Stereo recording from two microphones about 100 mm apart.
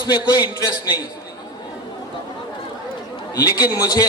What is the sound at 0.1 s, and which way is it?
Speech, 45° left (ahead or behind).